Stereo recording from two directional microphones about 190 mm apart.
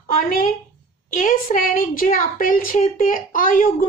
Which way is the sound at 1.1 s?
45° left (ahead or behind).